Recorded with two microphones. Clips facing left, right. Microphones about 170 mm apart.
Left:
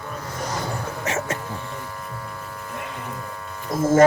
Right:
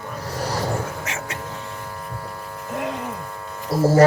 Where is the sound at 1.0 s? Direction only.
35° left (ahead or behind).